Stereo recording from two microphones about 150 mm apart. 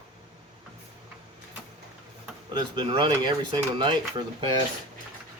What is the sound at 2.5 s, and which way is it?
Speech, 30° right (ahead or behind).